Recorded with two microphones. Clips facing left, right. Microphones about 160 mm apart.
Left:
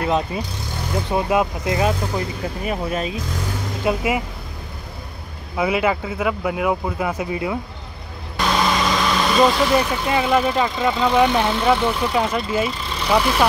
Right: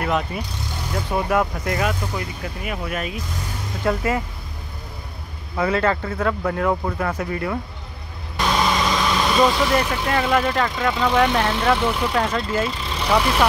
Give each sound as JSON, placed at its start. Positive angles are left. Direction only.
{"t": 0.0, "sound": "speech", "side_deg": 25}
{"t": 3.8, "sound": "speech", "side_deg": 15}
{"t": 5.6, "sound": "speech", "side_deg": 10}
{"t": 8.4, "sound": "speech", "side_deg": 0}